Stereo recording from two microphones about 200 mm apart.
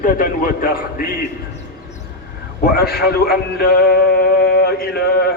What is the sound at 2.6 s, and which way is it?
A man's voice, 50° left (ahead or behind).